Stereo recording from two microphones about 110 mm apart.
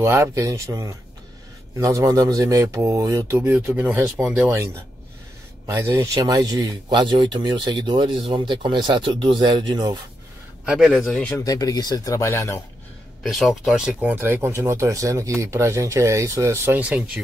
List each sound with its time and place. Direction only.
0.0 s speech: 25° right (ahead or behind); by 4.5 s 10° right (ahead or behind)
5.7 s speech: 25° right (ahead or behind); by 9.8 s 40° right (ahead or behind)
10.6 s speech: 5° right (ahead or behind)
10.9 s speech: 5° left (ahead or behind)
11.4 s speech: 35° left (ahead or behind)
13.2 s speech: centre (ahead or behind)
14.1 s speech: 20° right (ahead or behind)